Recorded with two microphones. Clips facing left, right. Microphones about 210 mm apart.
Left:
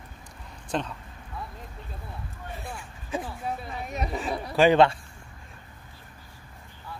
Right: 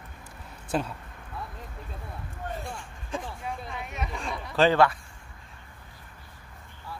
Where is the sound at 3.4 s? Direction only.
40° left (ahead or behind).